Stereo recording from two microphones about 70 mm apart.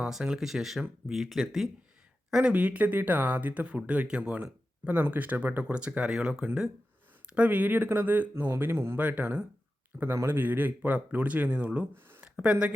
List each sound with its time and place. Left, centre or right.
0.0 s speech: centre
2.4 s speech: centre
7.3 s speech: centre; by 9.0 s right
9.0 s speech: right
11.9 s a sound: right
12.2 s speech: centre